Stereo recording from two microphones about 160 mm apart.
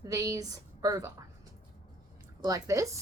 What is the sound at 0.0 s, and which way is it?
A woman's voice, 20° right (ahead or behind).